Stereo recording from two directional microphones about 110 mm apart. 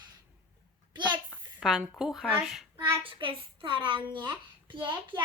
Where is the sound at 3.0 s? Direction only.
50° right (ahead or behind).